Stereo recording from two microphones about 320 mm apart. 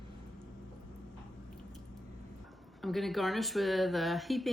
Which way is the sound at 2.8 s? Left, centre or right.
Centre.